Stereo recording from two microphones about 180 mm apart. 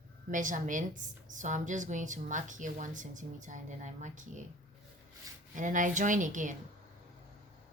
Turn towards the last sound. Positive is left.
turn(degrees=-45)  # may be behind; listen again after turning